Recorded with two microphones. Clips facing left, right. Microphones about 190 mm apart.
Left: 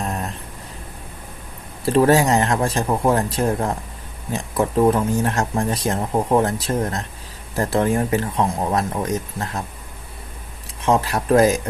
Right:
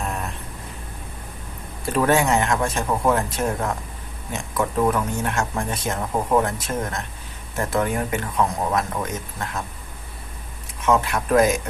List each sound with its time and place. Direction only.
1.8 s speech: 30° left (ahead or behind)
10.8 s speech: 30° left (ahead or behind)